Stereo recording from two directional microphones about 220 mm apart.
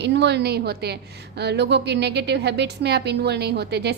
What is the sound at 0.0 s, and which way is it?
A woman's voice, 50° right (ahead or behind).